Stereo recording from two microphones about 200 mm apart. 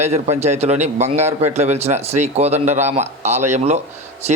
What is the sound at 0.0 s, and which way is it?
A man's voice, 35° right (ahead or behind).